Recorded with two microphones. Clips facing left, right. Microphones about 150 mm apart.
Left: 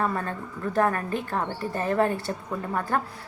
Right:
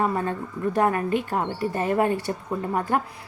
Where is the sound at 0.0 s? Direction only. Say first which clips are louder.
Right 3 dB; 20° right (ahead or behind).